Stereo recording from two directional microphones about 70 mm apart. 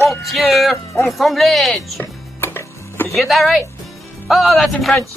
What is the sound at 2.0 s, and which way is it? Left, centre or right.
Music, left.